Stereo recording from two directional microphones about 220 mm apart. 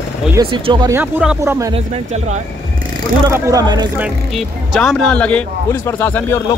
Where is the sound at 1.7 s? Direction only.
30° right (ahead or behind).